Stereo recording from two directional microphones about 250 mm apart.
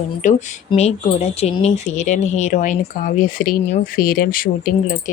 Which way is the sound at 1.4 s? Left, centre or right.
Left.